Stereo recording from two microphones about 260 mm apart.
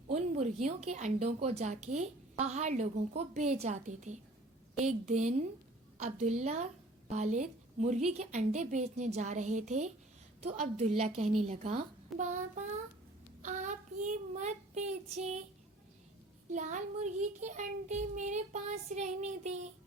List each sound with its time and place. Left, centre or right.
0.1 s child singing: right
7.1 s a woman's voice: right
8.1 s child singing: right
16.5 s child singing: right